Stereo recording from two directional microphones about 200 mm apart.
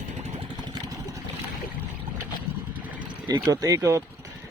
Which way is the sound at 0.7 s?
15° right (ahead or behind).